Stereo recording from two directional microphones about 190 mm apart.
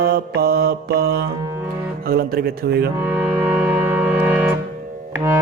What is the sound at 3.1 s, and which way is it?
Music, 10° right (ahead or behind).